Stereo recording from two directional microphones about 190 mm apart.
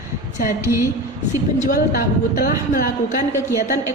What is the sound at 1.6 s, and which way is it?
A woman's voice, 50° left (ahead or behind).